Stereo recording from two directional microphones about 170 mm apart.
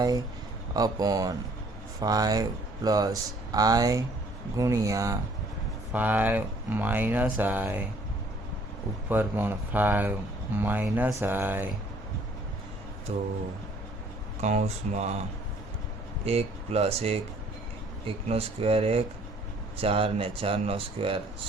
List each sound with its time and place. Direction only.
0.7 s speech: 20° right (ahead or behind)
9.0 s speech: 10° right (ahead or behind)
13.1 s speech: 40° right (ahead or behind)
14.4 s speech: 40° right (ahead or behind)
16.2 s speech: 35° right (ahead or behind)